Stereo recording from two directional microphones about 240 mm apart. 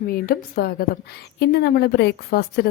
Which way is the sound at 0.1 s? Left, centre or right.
Left.